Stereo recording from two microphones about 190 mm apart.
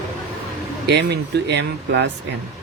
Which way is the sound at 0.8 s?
60° right (ahead or behind).